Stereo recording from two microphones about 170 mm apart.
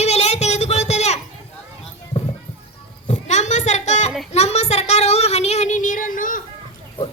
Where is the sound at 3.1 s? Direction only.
45° left (ahead or behind).